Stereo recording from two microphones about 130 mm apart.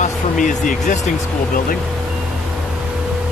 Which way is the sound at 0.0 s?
70° left (ahead or behind).